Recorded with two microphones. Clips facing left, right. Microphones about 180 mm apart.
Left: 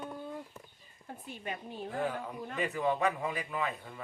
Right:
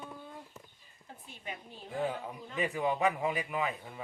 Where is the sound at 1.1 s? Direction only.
55° left (ahead or behind).